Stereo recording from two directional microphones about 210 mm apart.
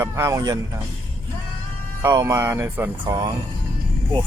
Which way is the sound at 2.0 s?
15° right (ahead or behind).